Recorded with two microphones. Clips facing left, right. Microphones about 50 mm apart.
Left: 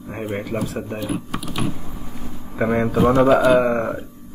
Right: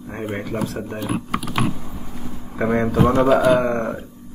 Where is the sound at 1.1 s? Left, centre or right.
Right.